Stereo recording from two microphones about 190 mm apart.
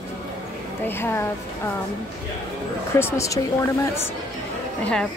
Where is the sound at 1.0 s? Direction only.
10° left (ahead or behind).